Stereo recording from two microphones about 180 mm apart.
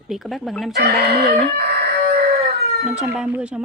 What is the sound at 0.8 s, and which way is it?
Speech, 60° right (ahead or behind).